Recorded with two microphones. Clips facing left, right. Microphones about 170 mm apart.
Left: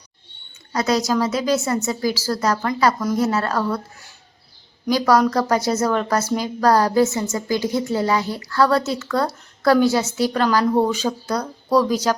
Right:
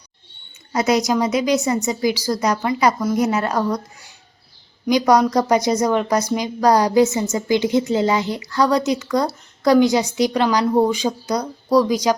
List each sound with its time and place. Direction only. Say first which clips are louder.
0.7 s a woman's voice: right 2 dB; 20° right (ahead or behind)
4.9 s a woman's voice: right 2 dB; 20° right (ahead or behind)